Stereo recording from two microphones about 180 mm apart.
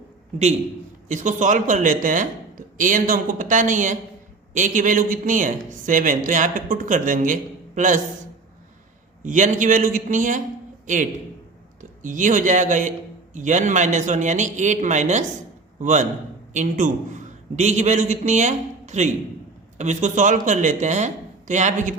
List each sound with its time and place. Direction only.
1.0 s speech: 40° right (ahead or behind)
9.2 s a man's voice: 45° right (ahead or behind)